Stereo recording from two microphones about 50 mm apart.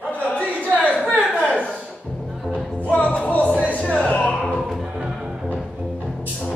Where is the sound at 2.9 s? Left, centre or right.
Left.